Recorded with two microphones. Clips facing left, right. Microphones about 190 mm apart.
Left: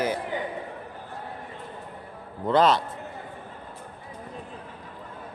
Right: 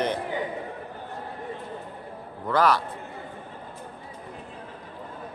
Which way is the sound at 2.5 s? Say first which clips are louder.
Left 2 dB; 20° left (ahead or behind).